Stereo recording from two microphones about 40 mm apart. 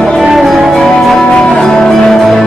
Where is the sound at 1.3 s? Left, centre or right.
Left.